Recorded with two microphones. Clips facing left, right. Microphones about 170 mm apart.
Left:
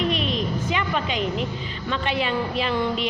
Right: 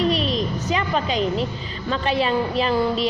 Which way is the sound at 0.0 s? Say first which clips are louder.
Right 3 dB; 35° right (ahead or behind).